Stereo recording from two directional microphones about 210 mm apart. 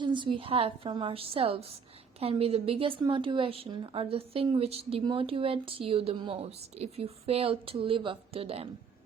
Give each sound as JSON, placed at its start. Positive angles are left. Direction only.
{"t": 0.0, "sound": "a woman's voice", "side_deg": -20}